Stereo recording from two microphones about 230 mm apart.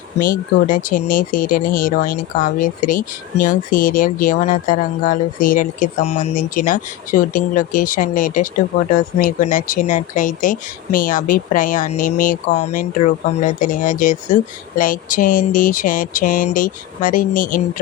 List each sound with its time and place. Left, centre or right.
0.2 s speech: left